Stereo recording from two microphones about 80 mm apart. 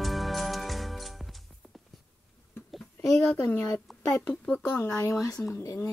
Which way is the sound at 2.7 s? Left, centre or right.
Centre.